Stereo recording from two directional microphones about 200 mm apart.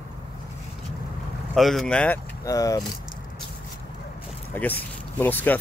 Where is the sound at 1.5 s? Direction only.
Centre (ahead or behind).